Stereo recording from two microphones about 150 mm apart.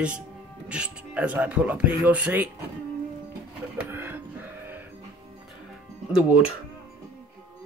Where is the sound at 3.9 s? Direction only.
15° right (ahead or behind).